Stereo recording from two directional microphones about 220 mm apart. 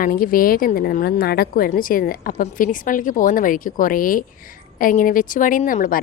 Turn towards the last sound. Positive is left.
turn(degrees=40)  # may be behind; listen again after turning